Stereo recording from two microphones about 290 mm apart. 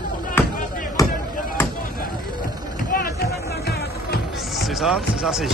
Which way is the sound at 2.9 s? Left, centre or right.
Left.